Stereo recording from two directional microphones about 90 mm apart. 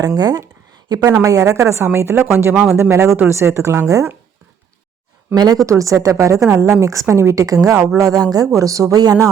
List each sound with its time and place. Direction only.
0.0 s speech: 45° right (ahead or behind)
0.9 s a woman's voice: 50° right (ahead or behind)
5.3 s speech: 45° right (ahead or behind)
5.6 s a woman's voice: 35° right (ahead or behind)